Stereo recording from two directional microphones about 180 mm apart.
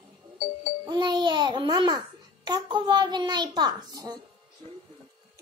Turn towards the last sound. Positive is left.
turn(degrees=-20)  # may be behind; listen again after turning